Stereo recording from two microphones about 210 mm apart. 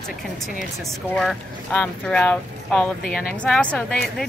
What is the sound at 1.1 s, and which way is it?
Speech, 5° left (ahead or behind).